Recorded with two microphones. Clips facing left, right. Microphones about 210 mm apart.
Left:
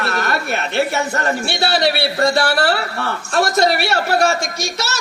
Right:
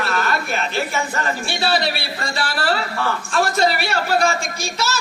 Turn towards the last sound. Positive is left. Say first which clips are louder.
# left 1 dB
turn(degrees=70)  # may be behind; listen again after turning